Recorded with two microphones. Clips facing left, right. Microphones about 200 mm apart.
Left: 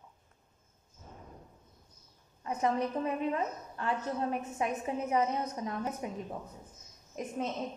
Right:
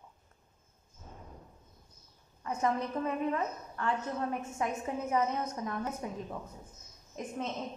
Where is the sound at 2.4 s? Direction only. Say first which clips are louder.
Left 1 dB; 20° left (ahead or behind).